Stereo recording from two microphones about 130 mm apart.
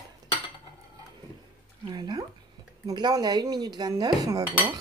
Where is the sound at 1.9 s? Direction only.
35° right (ahead or behind).